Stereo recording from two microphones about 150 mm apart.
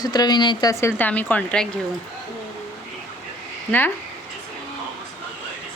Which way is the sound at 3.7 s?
10° left (ahead or behind).